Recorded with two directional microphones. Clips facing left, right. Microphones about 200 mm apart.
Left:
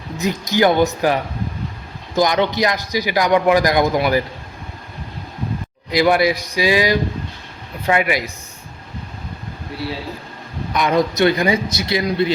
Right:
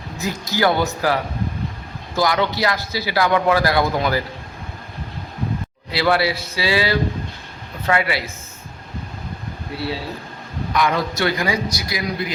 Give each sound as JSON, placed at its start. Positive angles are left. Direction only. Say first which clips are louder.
{"t": 0.2, "sound": "a man's voice", "louder": "left 4 dB", "side_deg": 20}
{"t": 5.9, "sound": "a man's voice", "louder": "left 4 dB", "side_deg": 15}
{"t": 10.8, "sound": "a man's voice", "louder": "left 4 dB", "side_deg": 20}